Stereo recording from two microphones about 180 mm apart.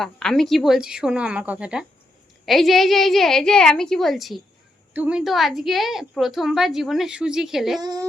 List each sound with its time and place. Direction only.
0.0 s a woman's voice: 5° left (ahead or behind)
7.8 s a woman's voice: 20° right (ahead or behind)